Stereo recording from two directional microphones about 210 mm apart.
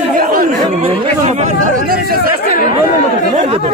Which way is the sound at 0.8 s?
30° right (ahead or behind).